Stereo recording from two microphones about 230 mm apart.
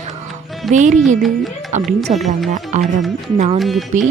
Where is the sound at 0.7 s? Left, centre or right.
Right.